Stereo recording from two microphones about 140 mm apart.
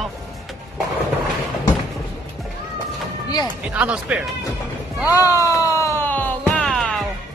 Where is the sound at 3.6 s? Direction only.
10° right (ahead or behind).